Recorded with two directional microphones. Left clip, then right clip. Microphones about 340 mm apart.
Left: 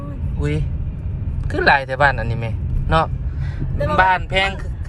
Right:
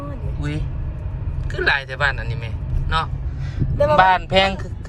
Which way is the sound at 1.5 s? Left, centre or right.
Centre.